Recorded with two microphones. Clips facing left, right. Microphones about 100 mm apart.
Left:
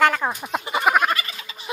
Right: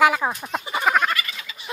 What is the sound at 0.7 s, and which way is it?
Frog, 10° left (ahead or behind).